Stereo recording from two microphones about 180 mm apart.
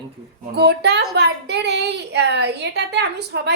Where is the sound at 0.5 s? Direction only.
65° right (ahead or behind).